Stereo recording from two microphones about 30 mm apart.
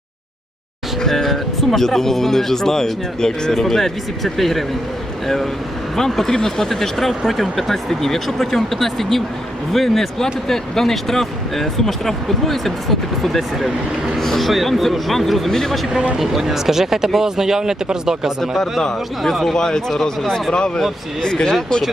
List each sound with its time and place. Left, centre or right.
1.1 s speech: centre
6.2 s speech: centre
16.1 s speech: centre
18.8 s speech: centre
19.3 s speech: centre
19.5 s speech: left